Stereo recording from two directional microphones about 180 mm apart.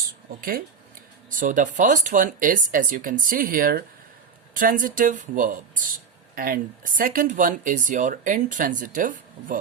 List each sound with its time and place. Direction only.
0.3 s speech: 55° right (ahead or behind)